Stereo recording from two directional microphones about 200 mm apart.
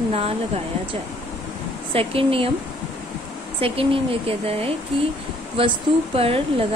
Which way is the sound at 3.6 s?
30° right (ahead or behind).